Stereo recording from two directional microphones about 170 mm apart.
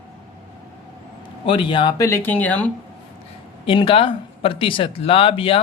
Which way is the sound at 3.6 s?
30° left (ahead or behind).